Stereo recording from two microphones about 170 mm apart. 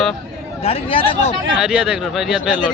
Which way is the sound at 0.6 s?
35° left (ahead or behind).